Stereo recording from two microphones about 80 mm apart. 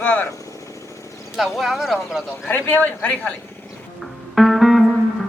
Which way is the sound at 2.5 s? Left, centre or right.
Left.